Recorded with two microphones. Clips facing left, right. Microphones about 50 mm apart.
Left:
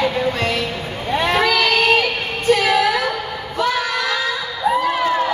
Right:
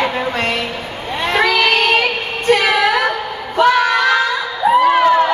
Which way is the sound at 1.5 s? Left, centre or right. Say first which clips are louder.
Right 2 dB; right.